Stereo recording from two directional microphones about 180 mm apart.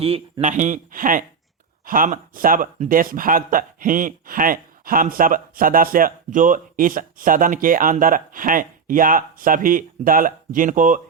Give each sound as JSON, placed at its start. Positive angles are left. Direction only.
{"t": 0.0, "sound": "speech", "side_deg": -35}